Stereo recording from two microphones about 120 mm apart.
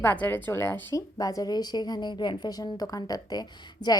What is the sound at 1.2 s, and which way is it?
A woman's voice, 30° left (ahead or behind).